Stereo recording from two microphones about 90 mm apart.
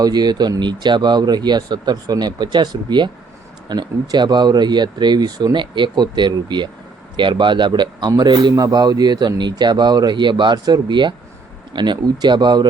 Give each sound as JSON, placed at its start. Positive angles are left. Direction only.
{"t": 0.0, "sound": "a man's voice", "side_deg": -50}